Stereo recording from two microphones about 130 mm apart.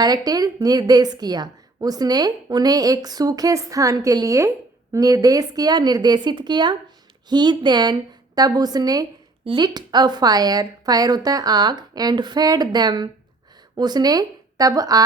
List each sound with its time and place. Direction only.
0.0 s a woman's voice: 30° right (ahead or behind)
9.4 s speech: 45° right (ahead or behind)
9.6 s a woman's voice: 35° right (ahead or behind)